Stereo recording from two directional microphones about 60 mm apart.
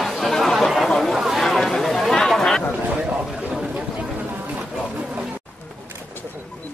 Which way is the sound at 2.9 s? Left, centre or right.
Right.